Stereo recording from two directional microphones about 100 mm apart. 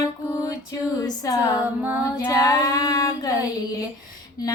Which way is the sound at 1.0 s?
35° left (ahead or behind).